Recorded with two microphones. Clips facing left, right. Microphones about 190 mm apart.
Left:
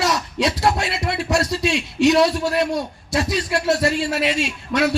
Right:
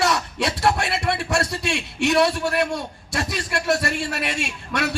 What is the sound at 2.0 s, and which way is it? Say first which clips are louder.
A man's voice: left 3 dB; 60° right (ahead or behind).